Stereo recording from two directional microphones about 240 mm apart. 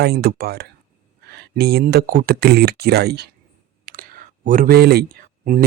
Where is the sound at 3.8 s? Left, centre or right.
Right.